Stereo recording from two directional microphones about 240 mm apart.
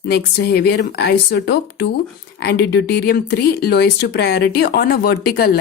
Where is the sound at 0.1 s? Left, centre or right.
Left.